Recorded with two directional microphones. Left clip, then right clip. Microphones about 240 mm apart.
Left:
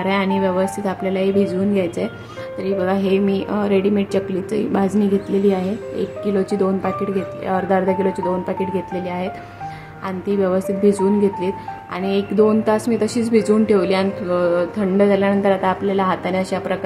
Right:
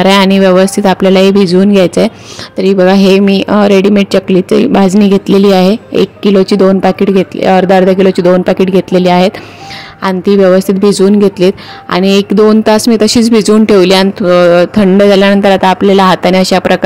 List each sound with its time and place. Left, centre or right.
0.0 s speech: right